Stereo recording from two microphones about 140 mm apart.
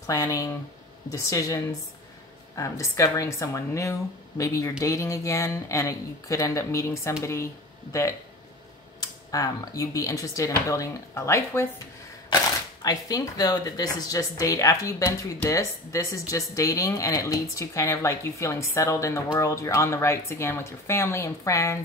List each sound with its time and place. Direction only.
0.0 s speech: 25° left (ahead or behind)
9.0 s speech: 25° left (ahead or behind)
12.8 s speech: 25° left (ahead or behind)